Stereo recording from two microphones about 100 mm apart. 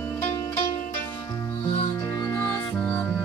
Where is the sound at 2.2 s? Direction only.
40° left (ahead or behind).